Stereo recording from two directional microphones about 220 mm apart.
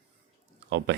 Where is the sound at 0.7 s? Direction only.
55° right (ahead or behind).